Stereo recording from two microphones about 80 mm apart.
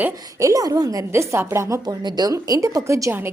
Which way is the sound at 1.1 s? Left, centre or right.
Right.